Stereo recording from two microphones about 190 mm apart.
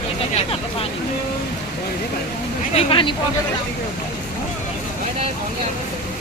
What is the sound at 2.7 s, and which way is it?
Speech, 25° left (ahead or behind).